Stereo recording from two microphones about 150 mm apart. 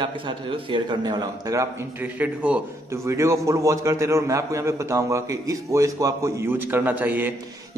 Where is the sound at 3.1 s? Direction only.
20° right (ahead or behind).